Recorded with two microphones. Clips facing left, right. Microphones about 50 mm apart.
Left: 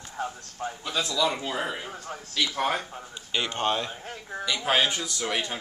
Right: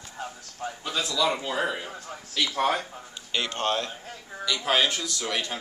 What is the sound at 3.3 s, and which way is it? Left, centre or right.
A man's voice, centre.